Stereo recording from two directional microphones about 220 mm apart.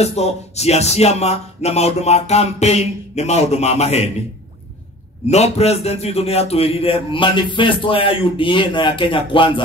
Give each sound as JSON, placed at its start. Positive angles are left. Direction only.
{"t": 0.0, "sound": "a man's voice", "side_deg": 30}
{"t": 5.3, "sound": "a man's voice", "side_deg": 30}